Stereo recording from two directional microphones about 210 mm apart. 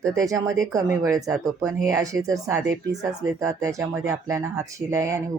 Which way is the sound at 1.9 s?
15° right (ahead or behind).